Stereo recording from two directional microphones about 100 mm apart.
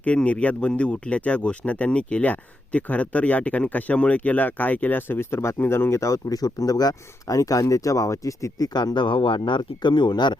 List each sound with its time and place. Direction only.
0.0 s speech: 10° left (ahead or behind); by 10.3 s 50° left (ahead or behind)